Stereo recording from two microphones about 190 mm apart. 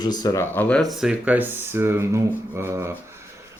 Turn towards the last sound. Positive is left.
turn(degrees=-15)  # may be behind; listen again after turning